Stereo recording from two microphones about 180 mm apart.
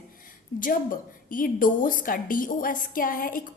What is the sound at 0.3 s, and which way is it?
A woman's voice, 50° left (ahead or behind).